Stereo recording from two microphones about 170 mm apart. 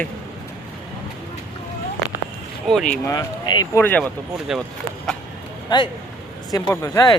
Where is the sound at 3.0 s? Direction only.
25° left (ahead or behind).